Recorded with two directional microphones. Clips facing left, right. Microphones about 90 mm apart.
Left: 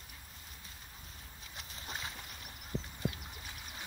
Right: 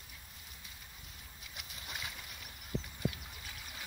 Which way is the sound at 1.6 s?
35° left (ahead or behind).